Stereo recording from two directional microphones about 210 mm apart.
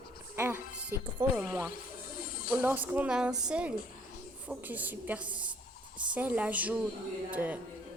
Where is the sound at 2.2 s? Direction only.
40° left (ahead or behind).